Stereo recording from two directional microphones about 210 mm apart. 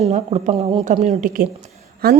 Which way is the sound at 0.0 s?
30° right (ahead or behind).